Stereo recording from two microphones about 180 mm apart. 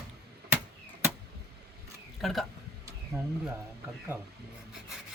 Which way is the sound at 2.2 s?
Centre (ahead or behind).